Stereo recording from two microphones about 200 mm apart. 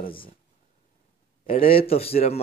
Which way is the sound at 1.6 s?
30° left (ahead or behind).